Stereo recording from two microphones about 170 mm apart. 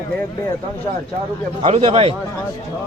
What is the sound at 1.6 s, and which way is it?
Speech, 35° right (ahead or behind).